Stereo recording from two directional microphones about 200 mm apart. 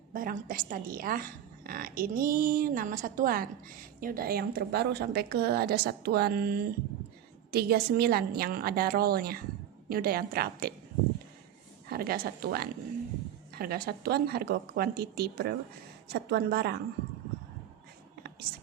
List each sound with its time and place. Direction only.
0.1 s a woman's voice: 45° right (ahead or behind)
11.9 s a woman's voice: 50° right (ahead or behind)